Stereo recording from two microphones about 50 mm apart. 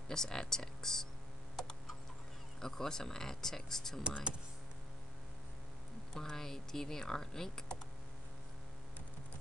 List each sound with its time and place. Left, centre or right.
0.1 s speech: centre
2.6 s speech: centre
4.0 s speech: centre
6.1 s speech: centre